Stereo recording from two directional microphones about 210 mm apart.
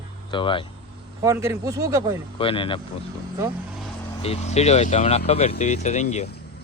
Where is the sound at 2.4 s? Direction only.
25° left (ahead or behind).